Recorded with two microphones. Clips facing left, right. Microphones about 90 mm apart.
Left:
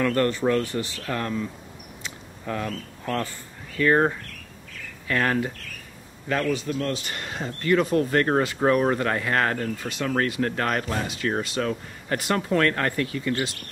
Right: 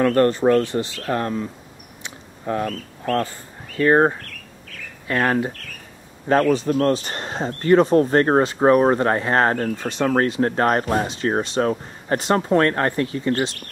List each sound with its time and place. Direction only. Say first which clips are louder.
0.0 s speech: right 6 dB; 35° right (ahead or behind)
2.0 s a sound: right 6 dB; 30° right (ahead or behind)
2.6 s speech: right 5 dB; 40° right (ahead or behind)